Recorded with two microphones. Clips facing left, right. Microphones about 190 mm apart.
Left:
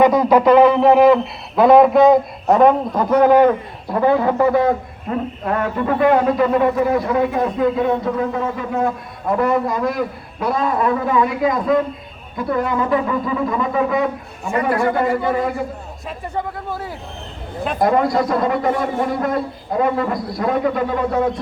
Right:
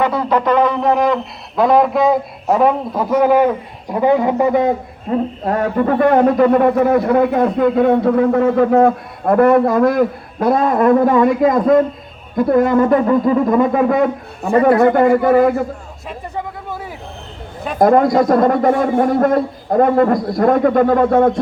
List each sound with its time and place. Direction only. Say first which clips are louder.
0.0 s speech: left 4 dB; 15° left (ahead or behind); by 4.7 s 20° right (ahead or behind)
5.1 s a sound: right 5 dB; 25° right (ahead or behind)
5.5 s a man's voice: right 4 dB; 40° right (ahead or behind)
17.7 s a man's voice: right 5 dB; 50° right (ahead or behind)